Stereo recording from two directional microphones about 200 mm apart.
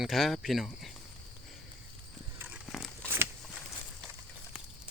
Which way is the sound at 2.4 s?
10° right (ahead or behind).